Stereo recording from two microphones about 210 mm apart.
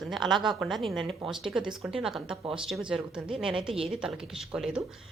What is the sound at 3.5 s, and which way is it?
Speech, 25° right (ahead or behind).